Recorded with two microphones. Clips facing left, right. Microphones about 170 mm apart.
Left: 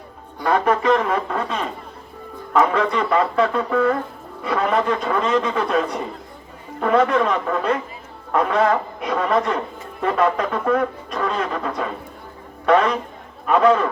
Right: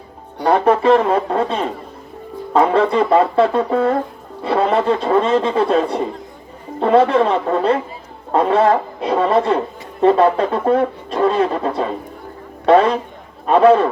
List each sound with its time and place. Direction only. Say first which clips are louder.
0.4 s speech: right 5 dB; 30° right (ahead or behind)